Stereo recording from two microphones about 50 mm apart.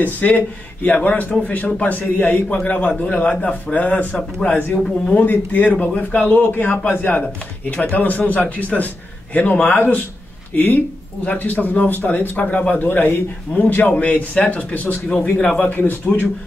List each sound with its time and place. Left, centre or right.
0.0 s a man's voice: left
13.9 s a man's voice: left